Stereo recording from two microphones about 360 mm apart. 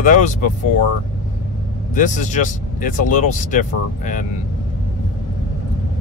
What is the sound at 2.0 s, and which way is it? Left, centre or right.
Speech, centre.